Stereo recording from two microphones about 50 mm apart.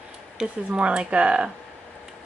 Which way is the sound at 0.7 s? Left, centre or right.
Right.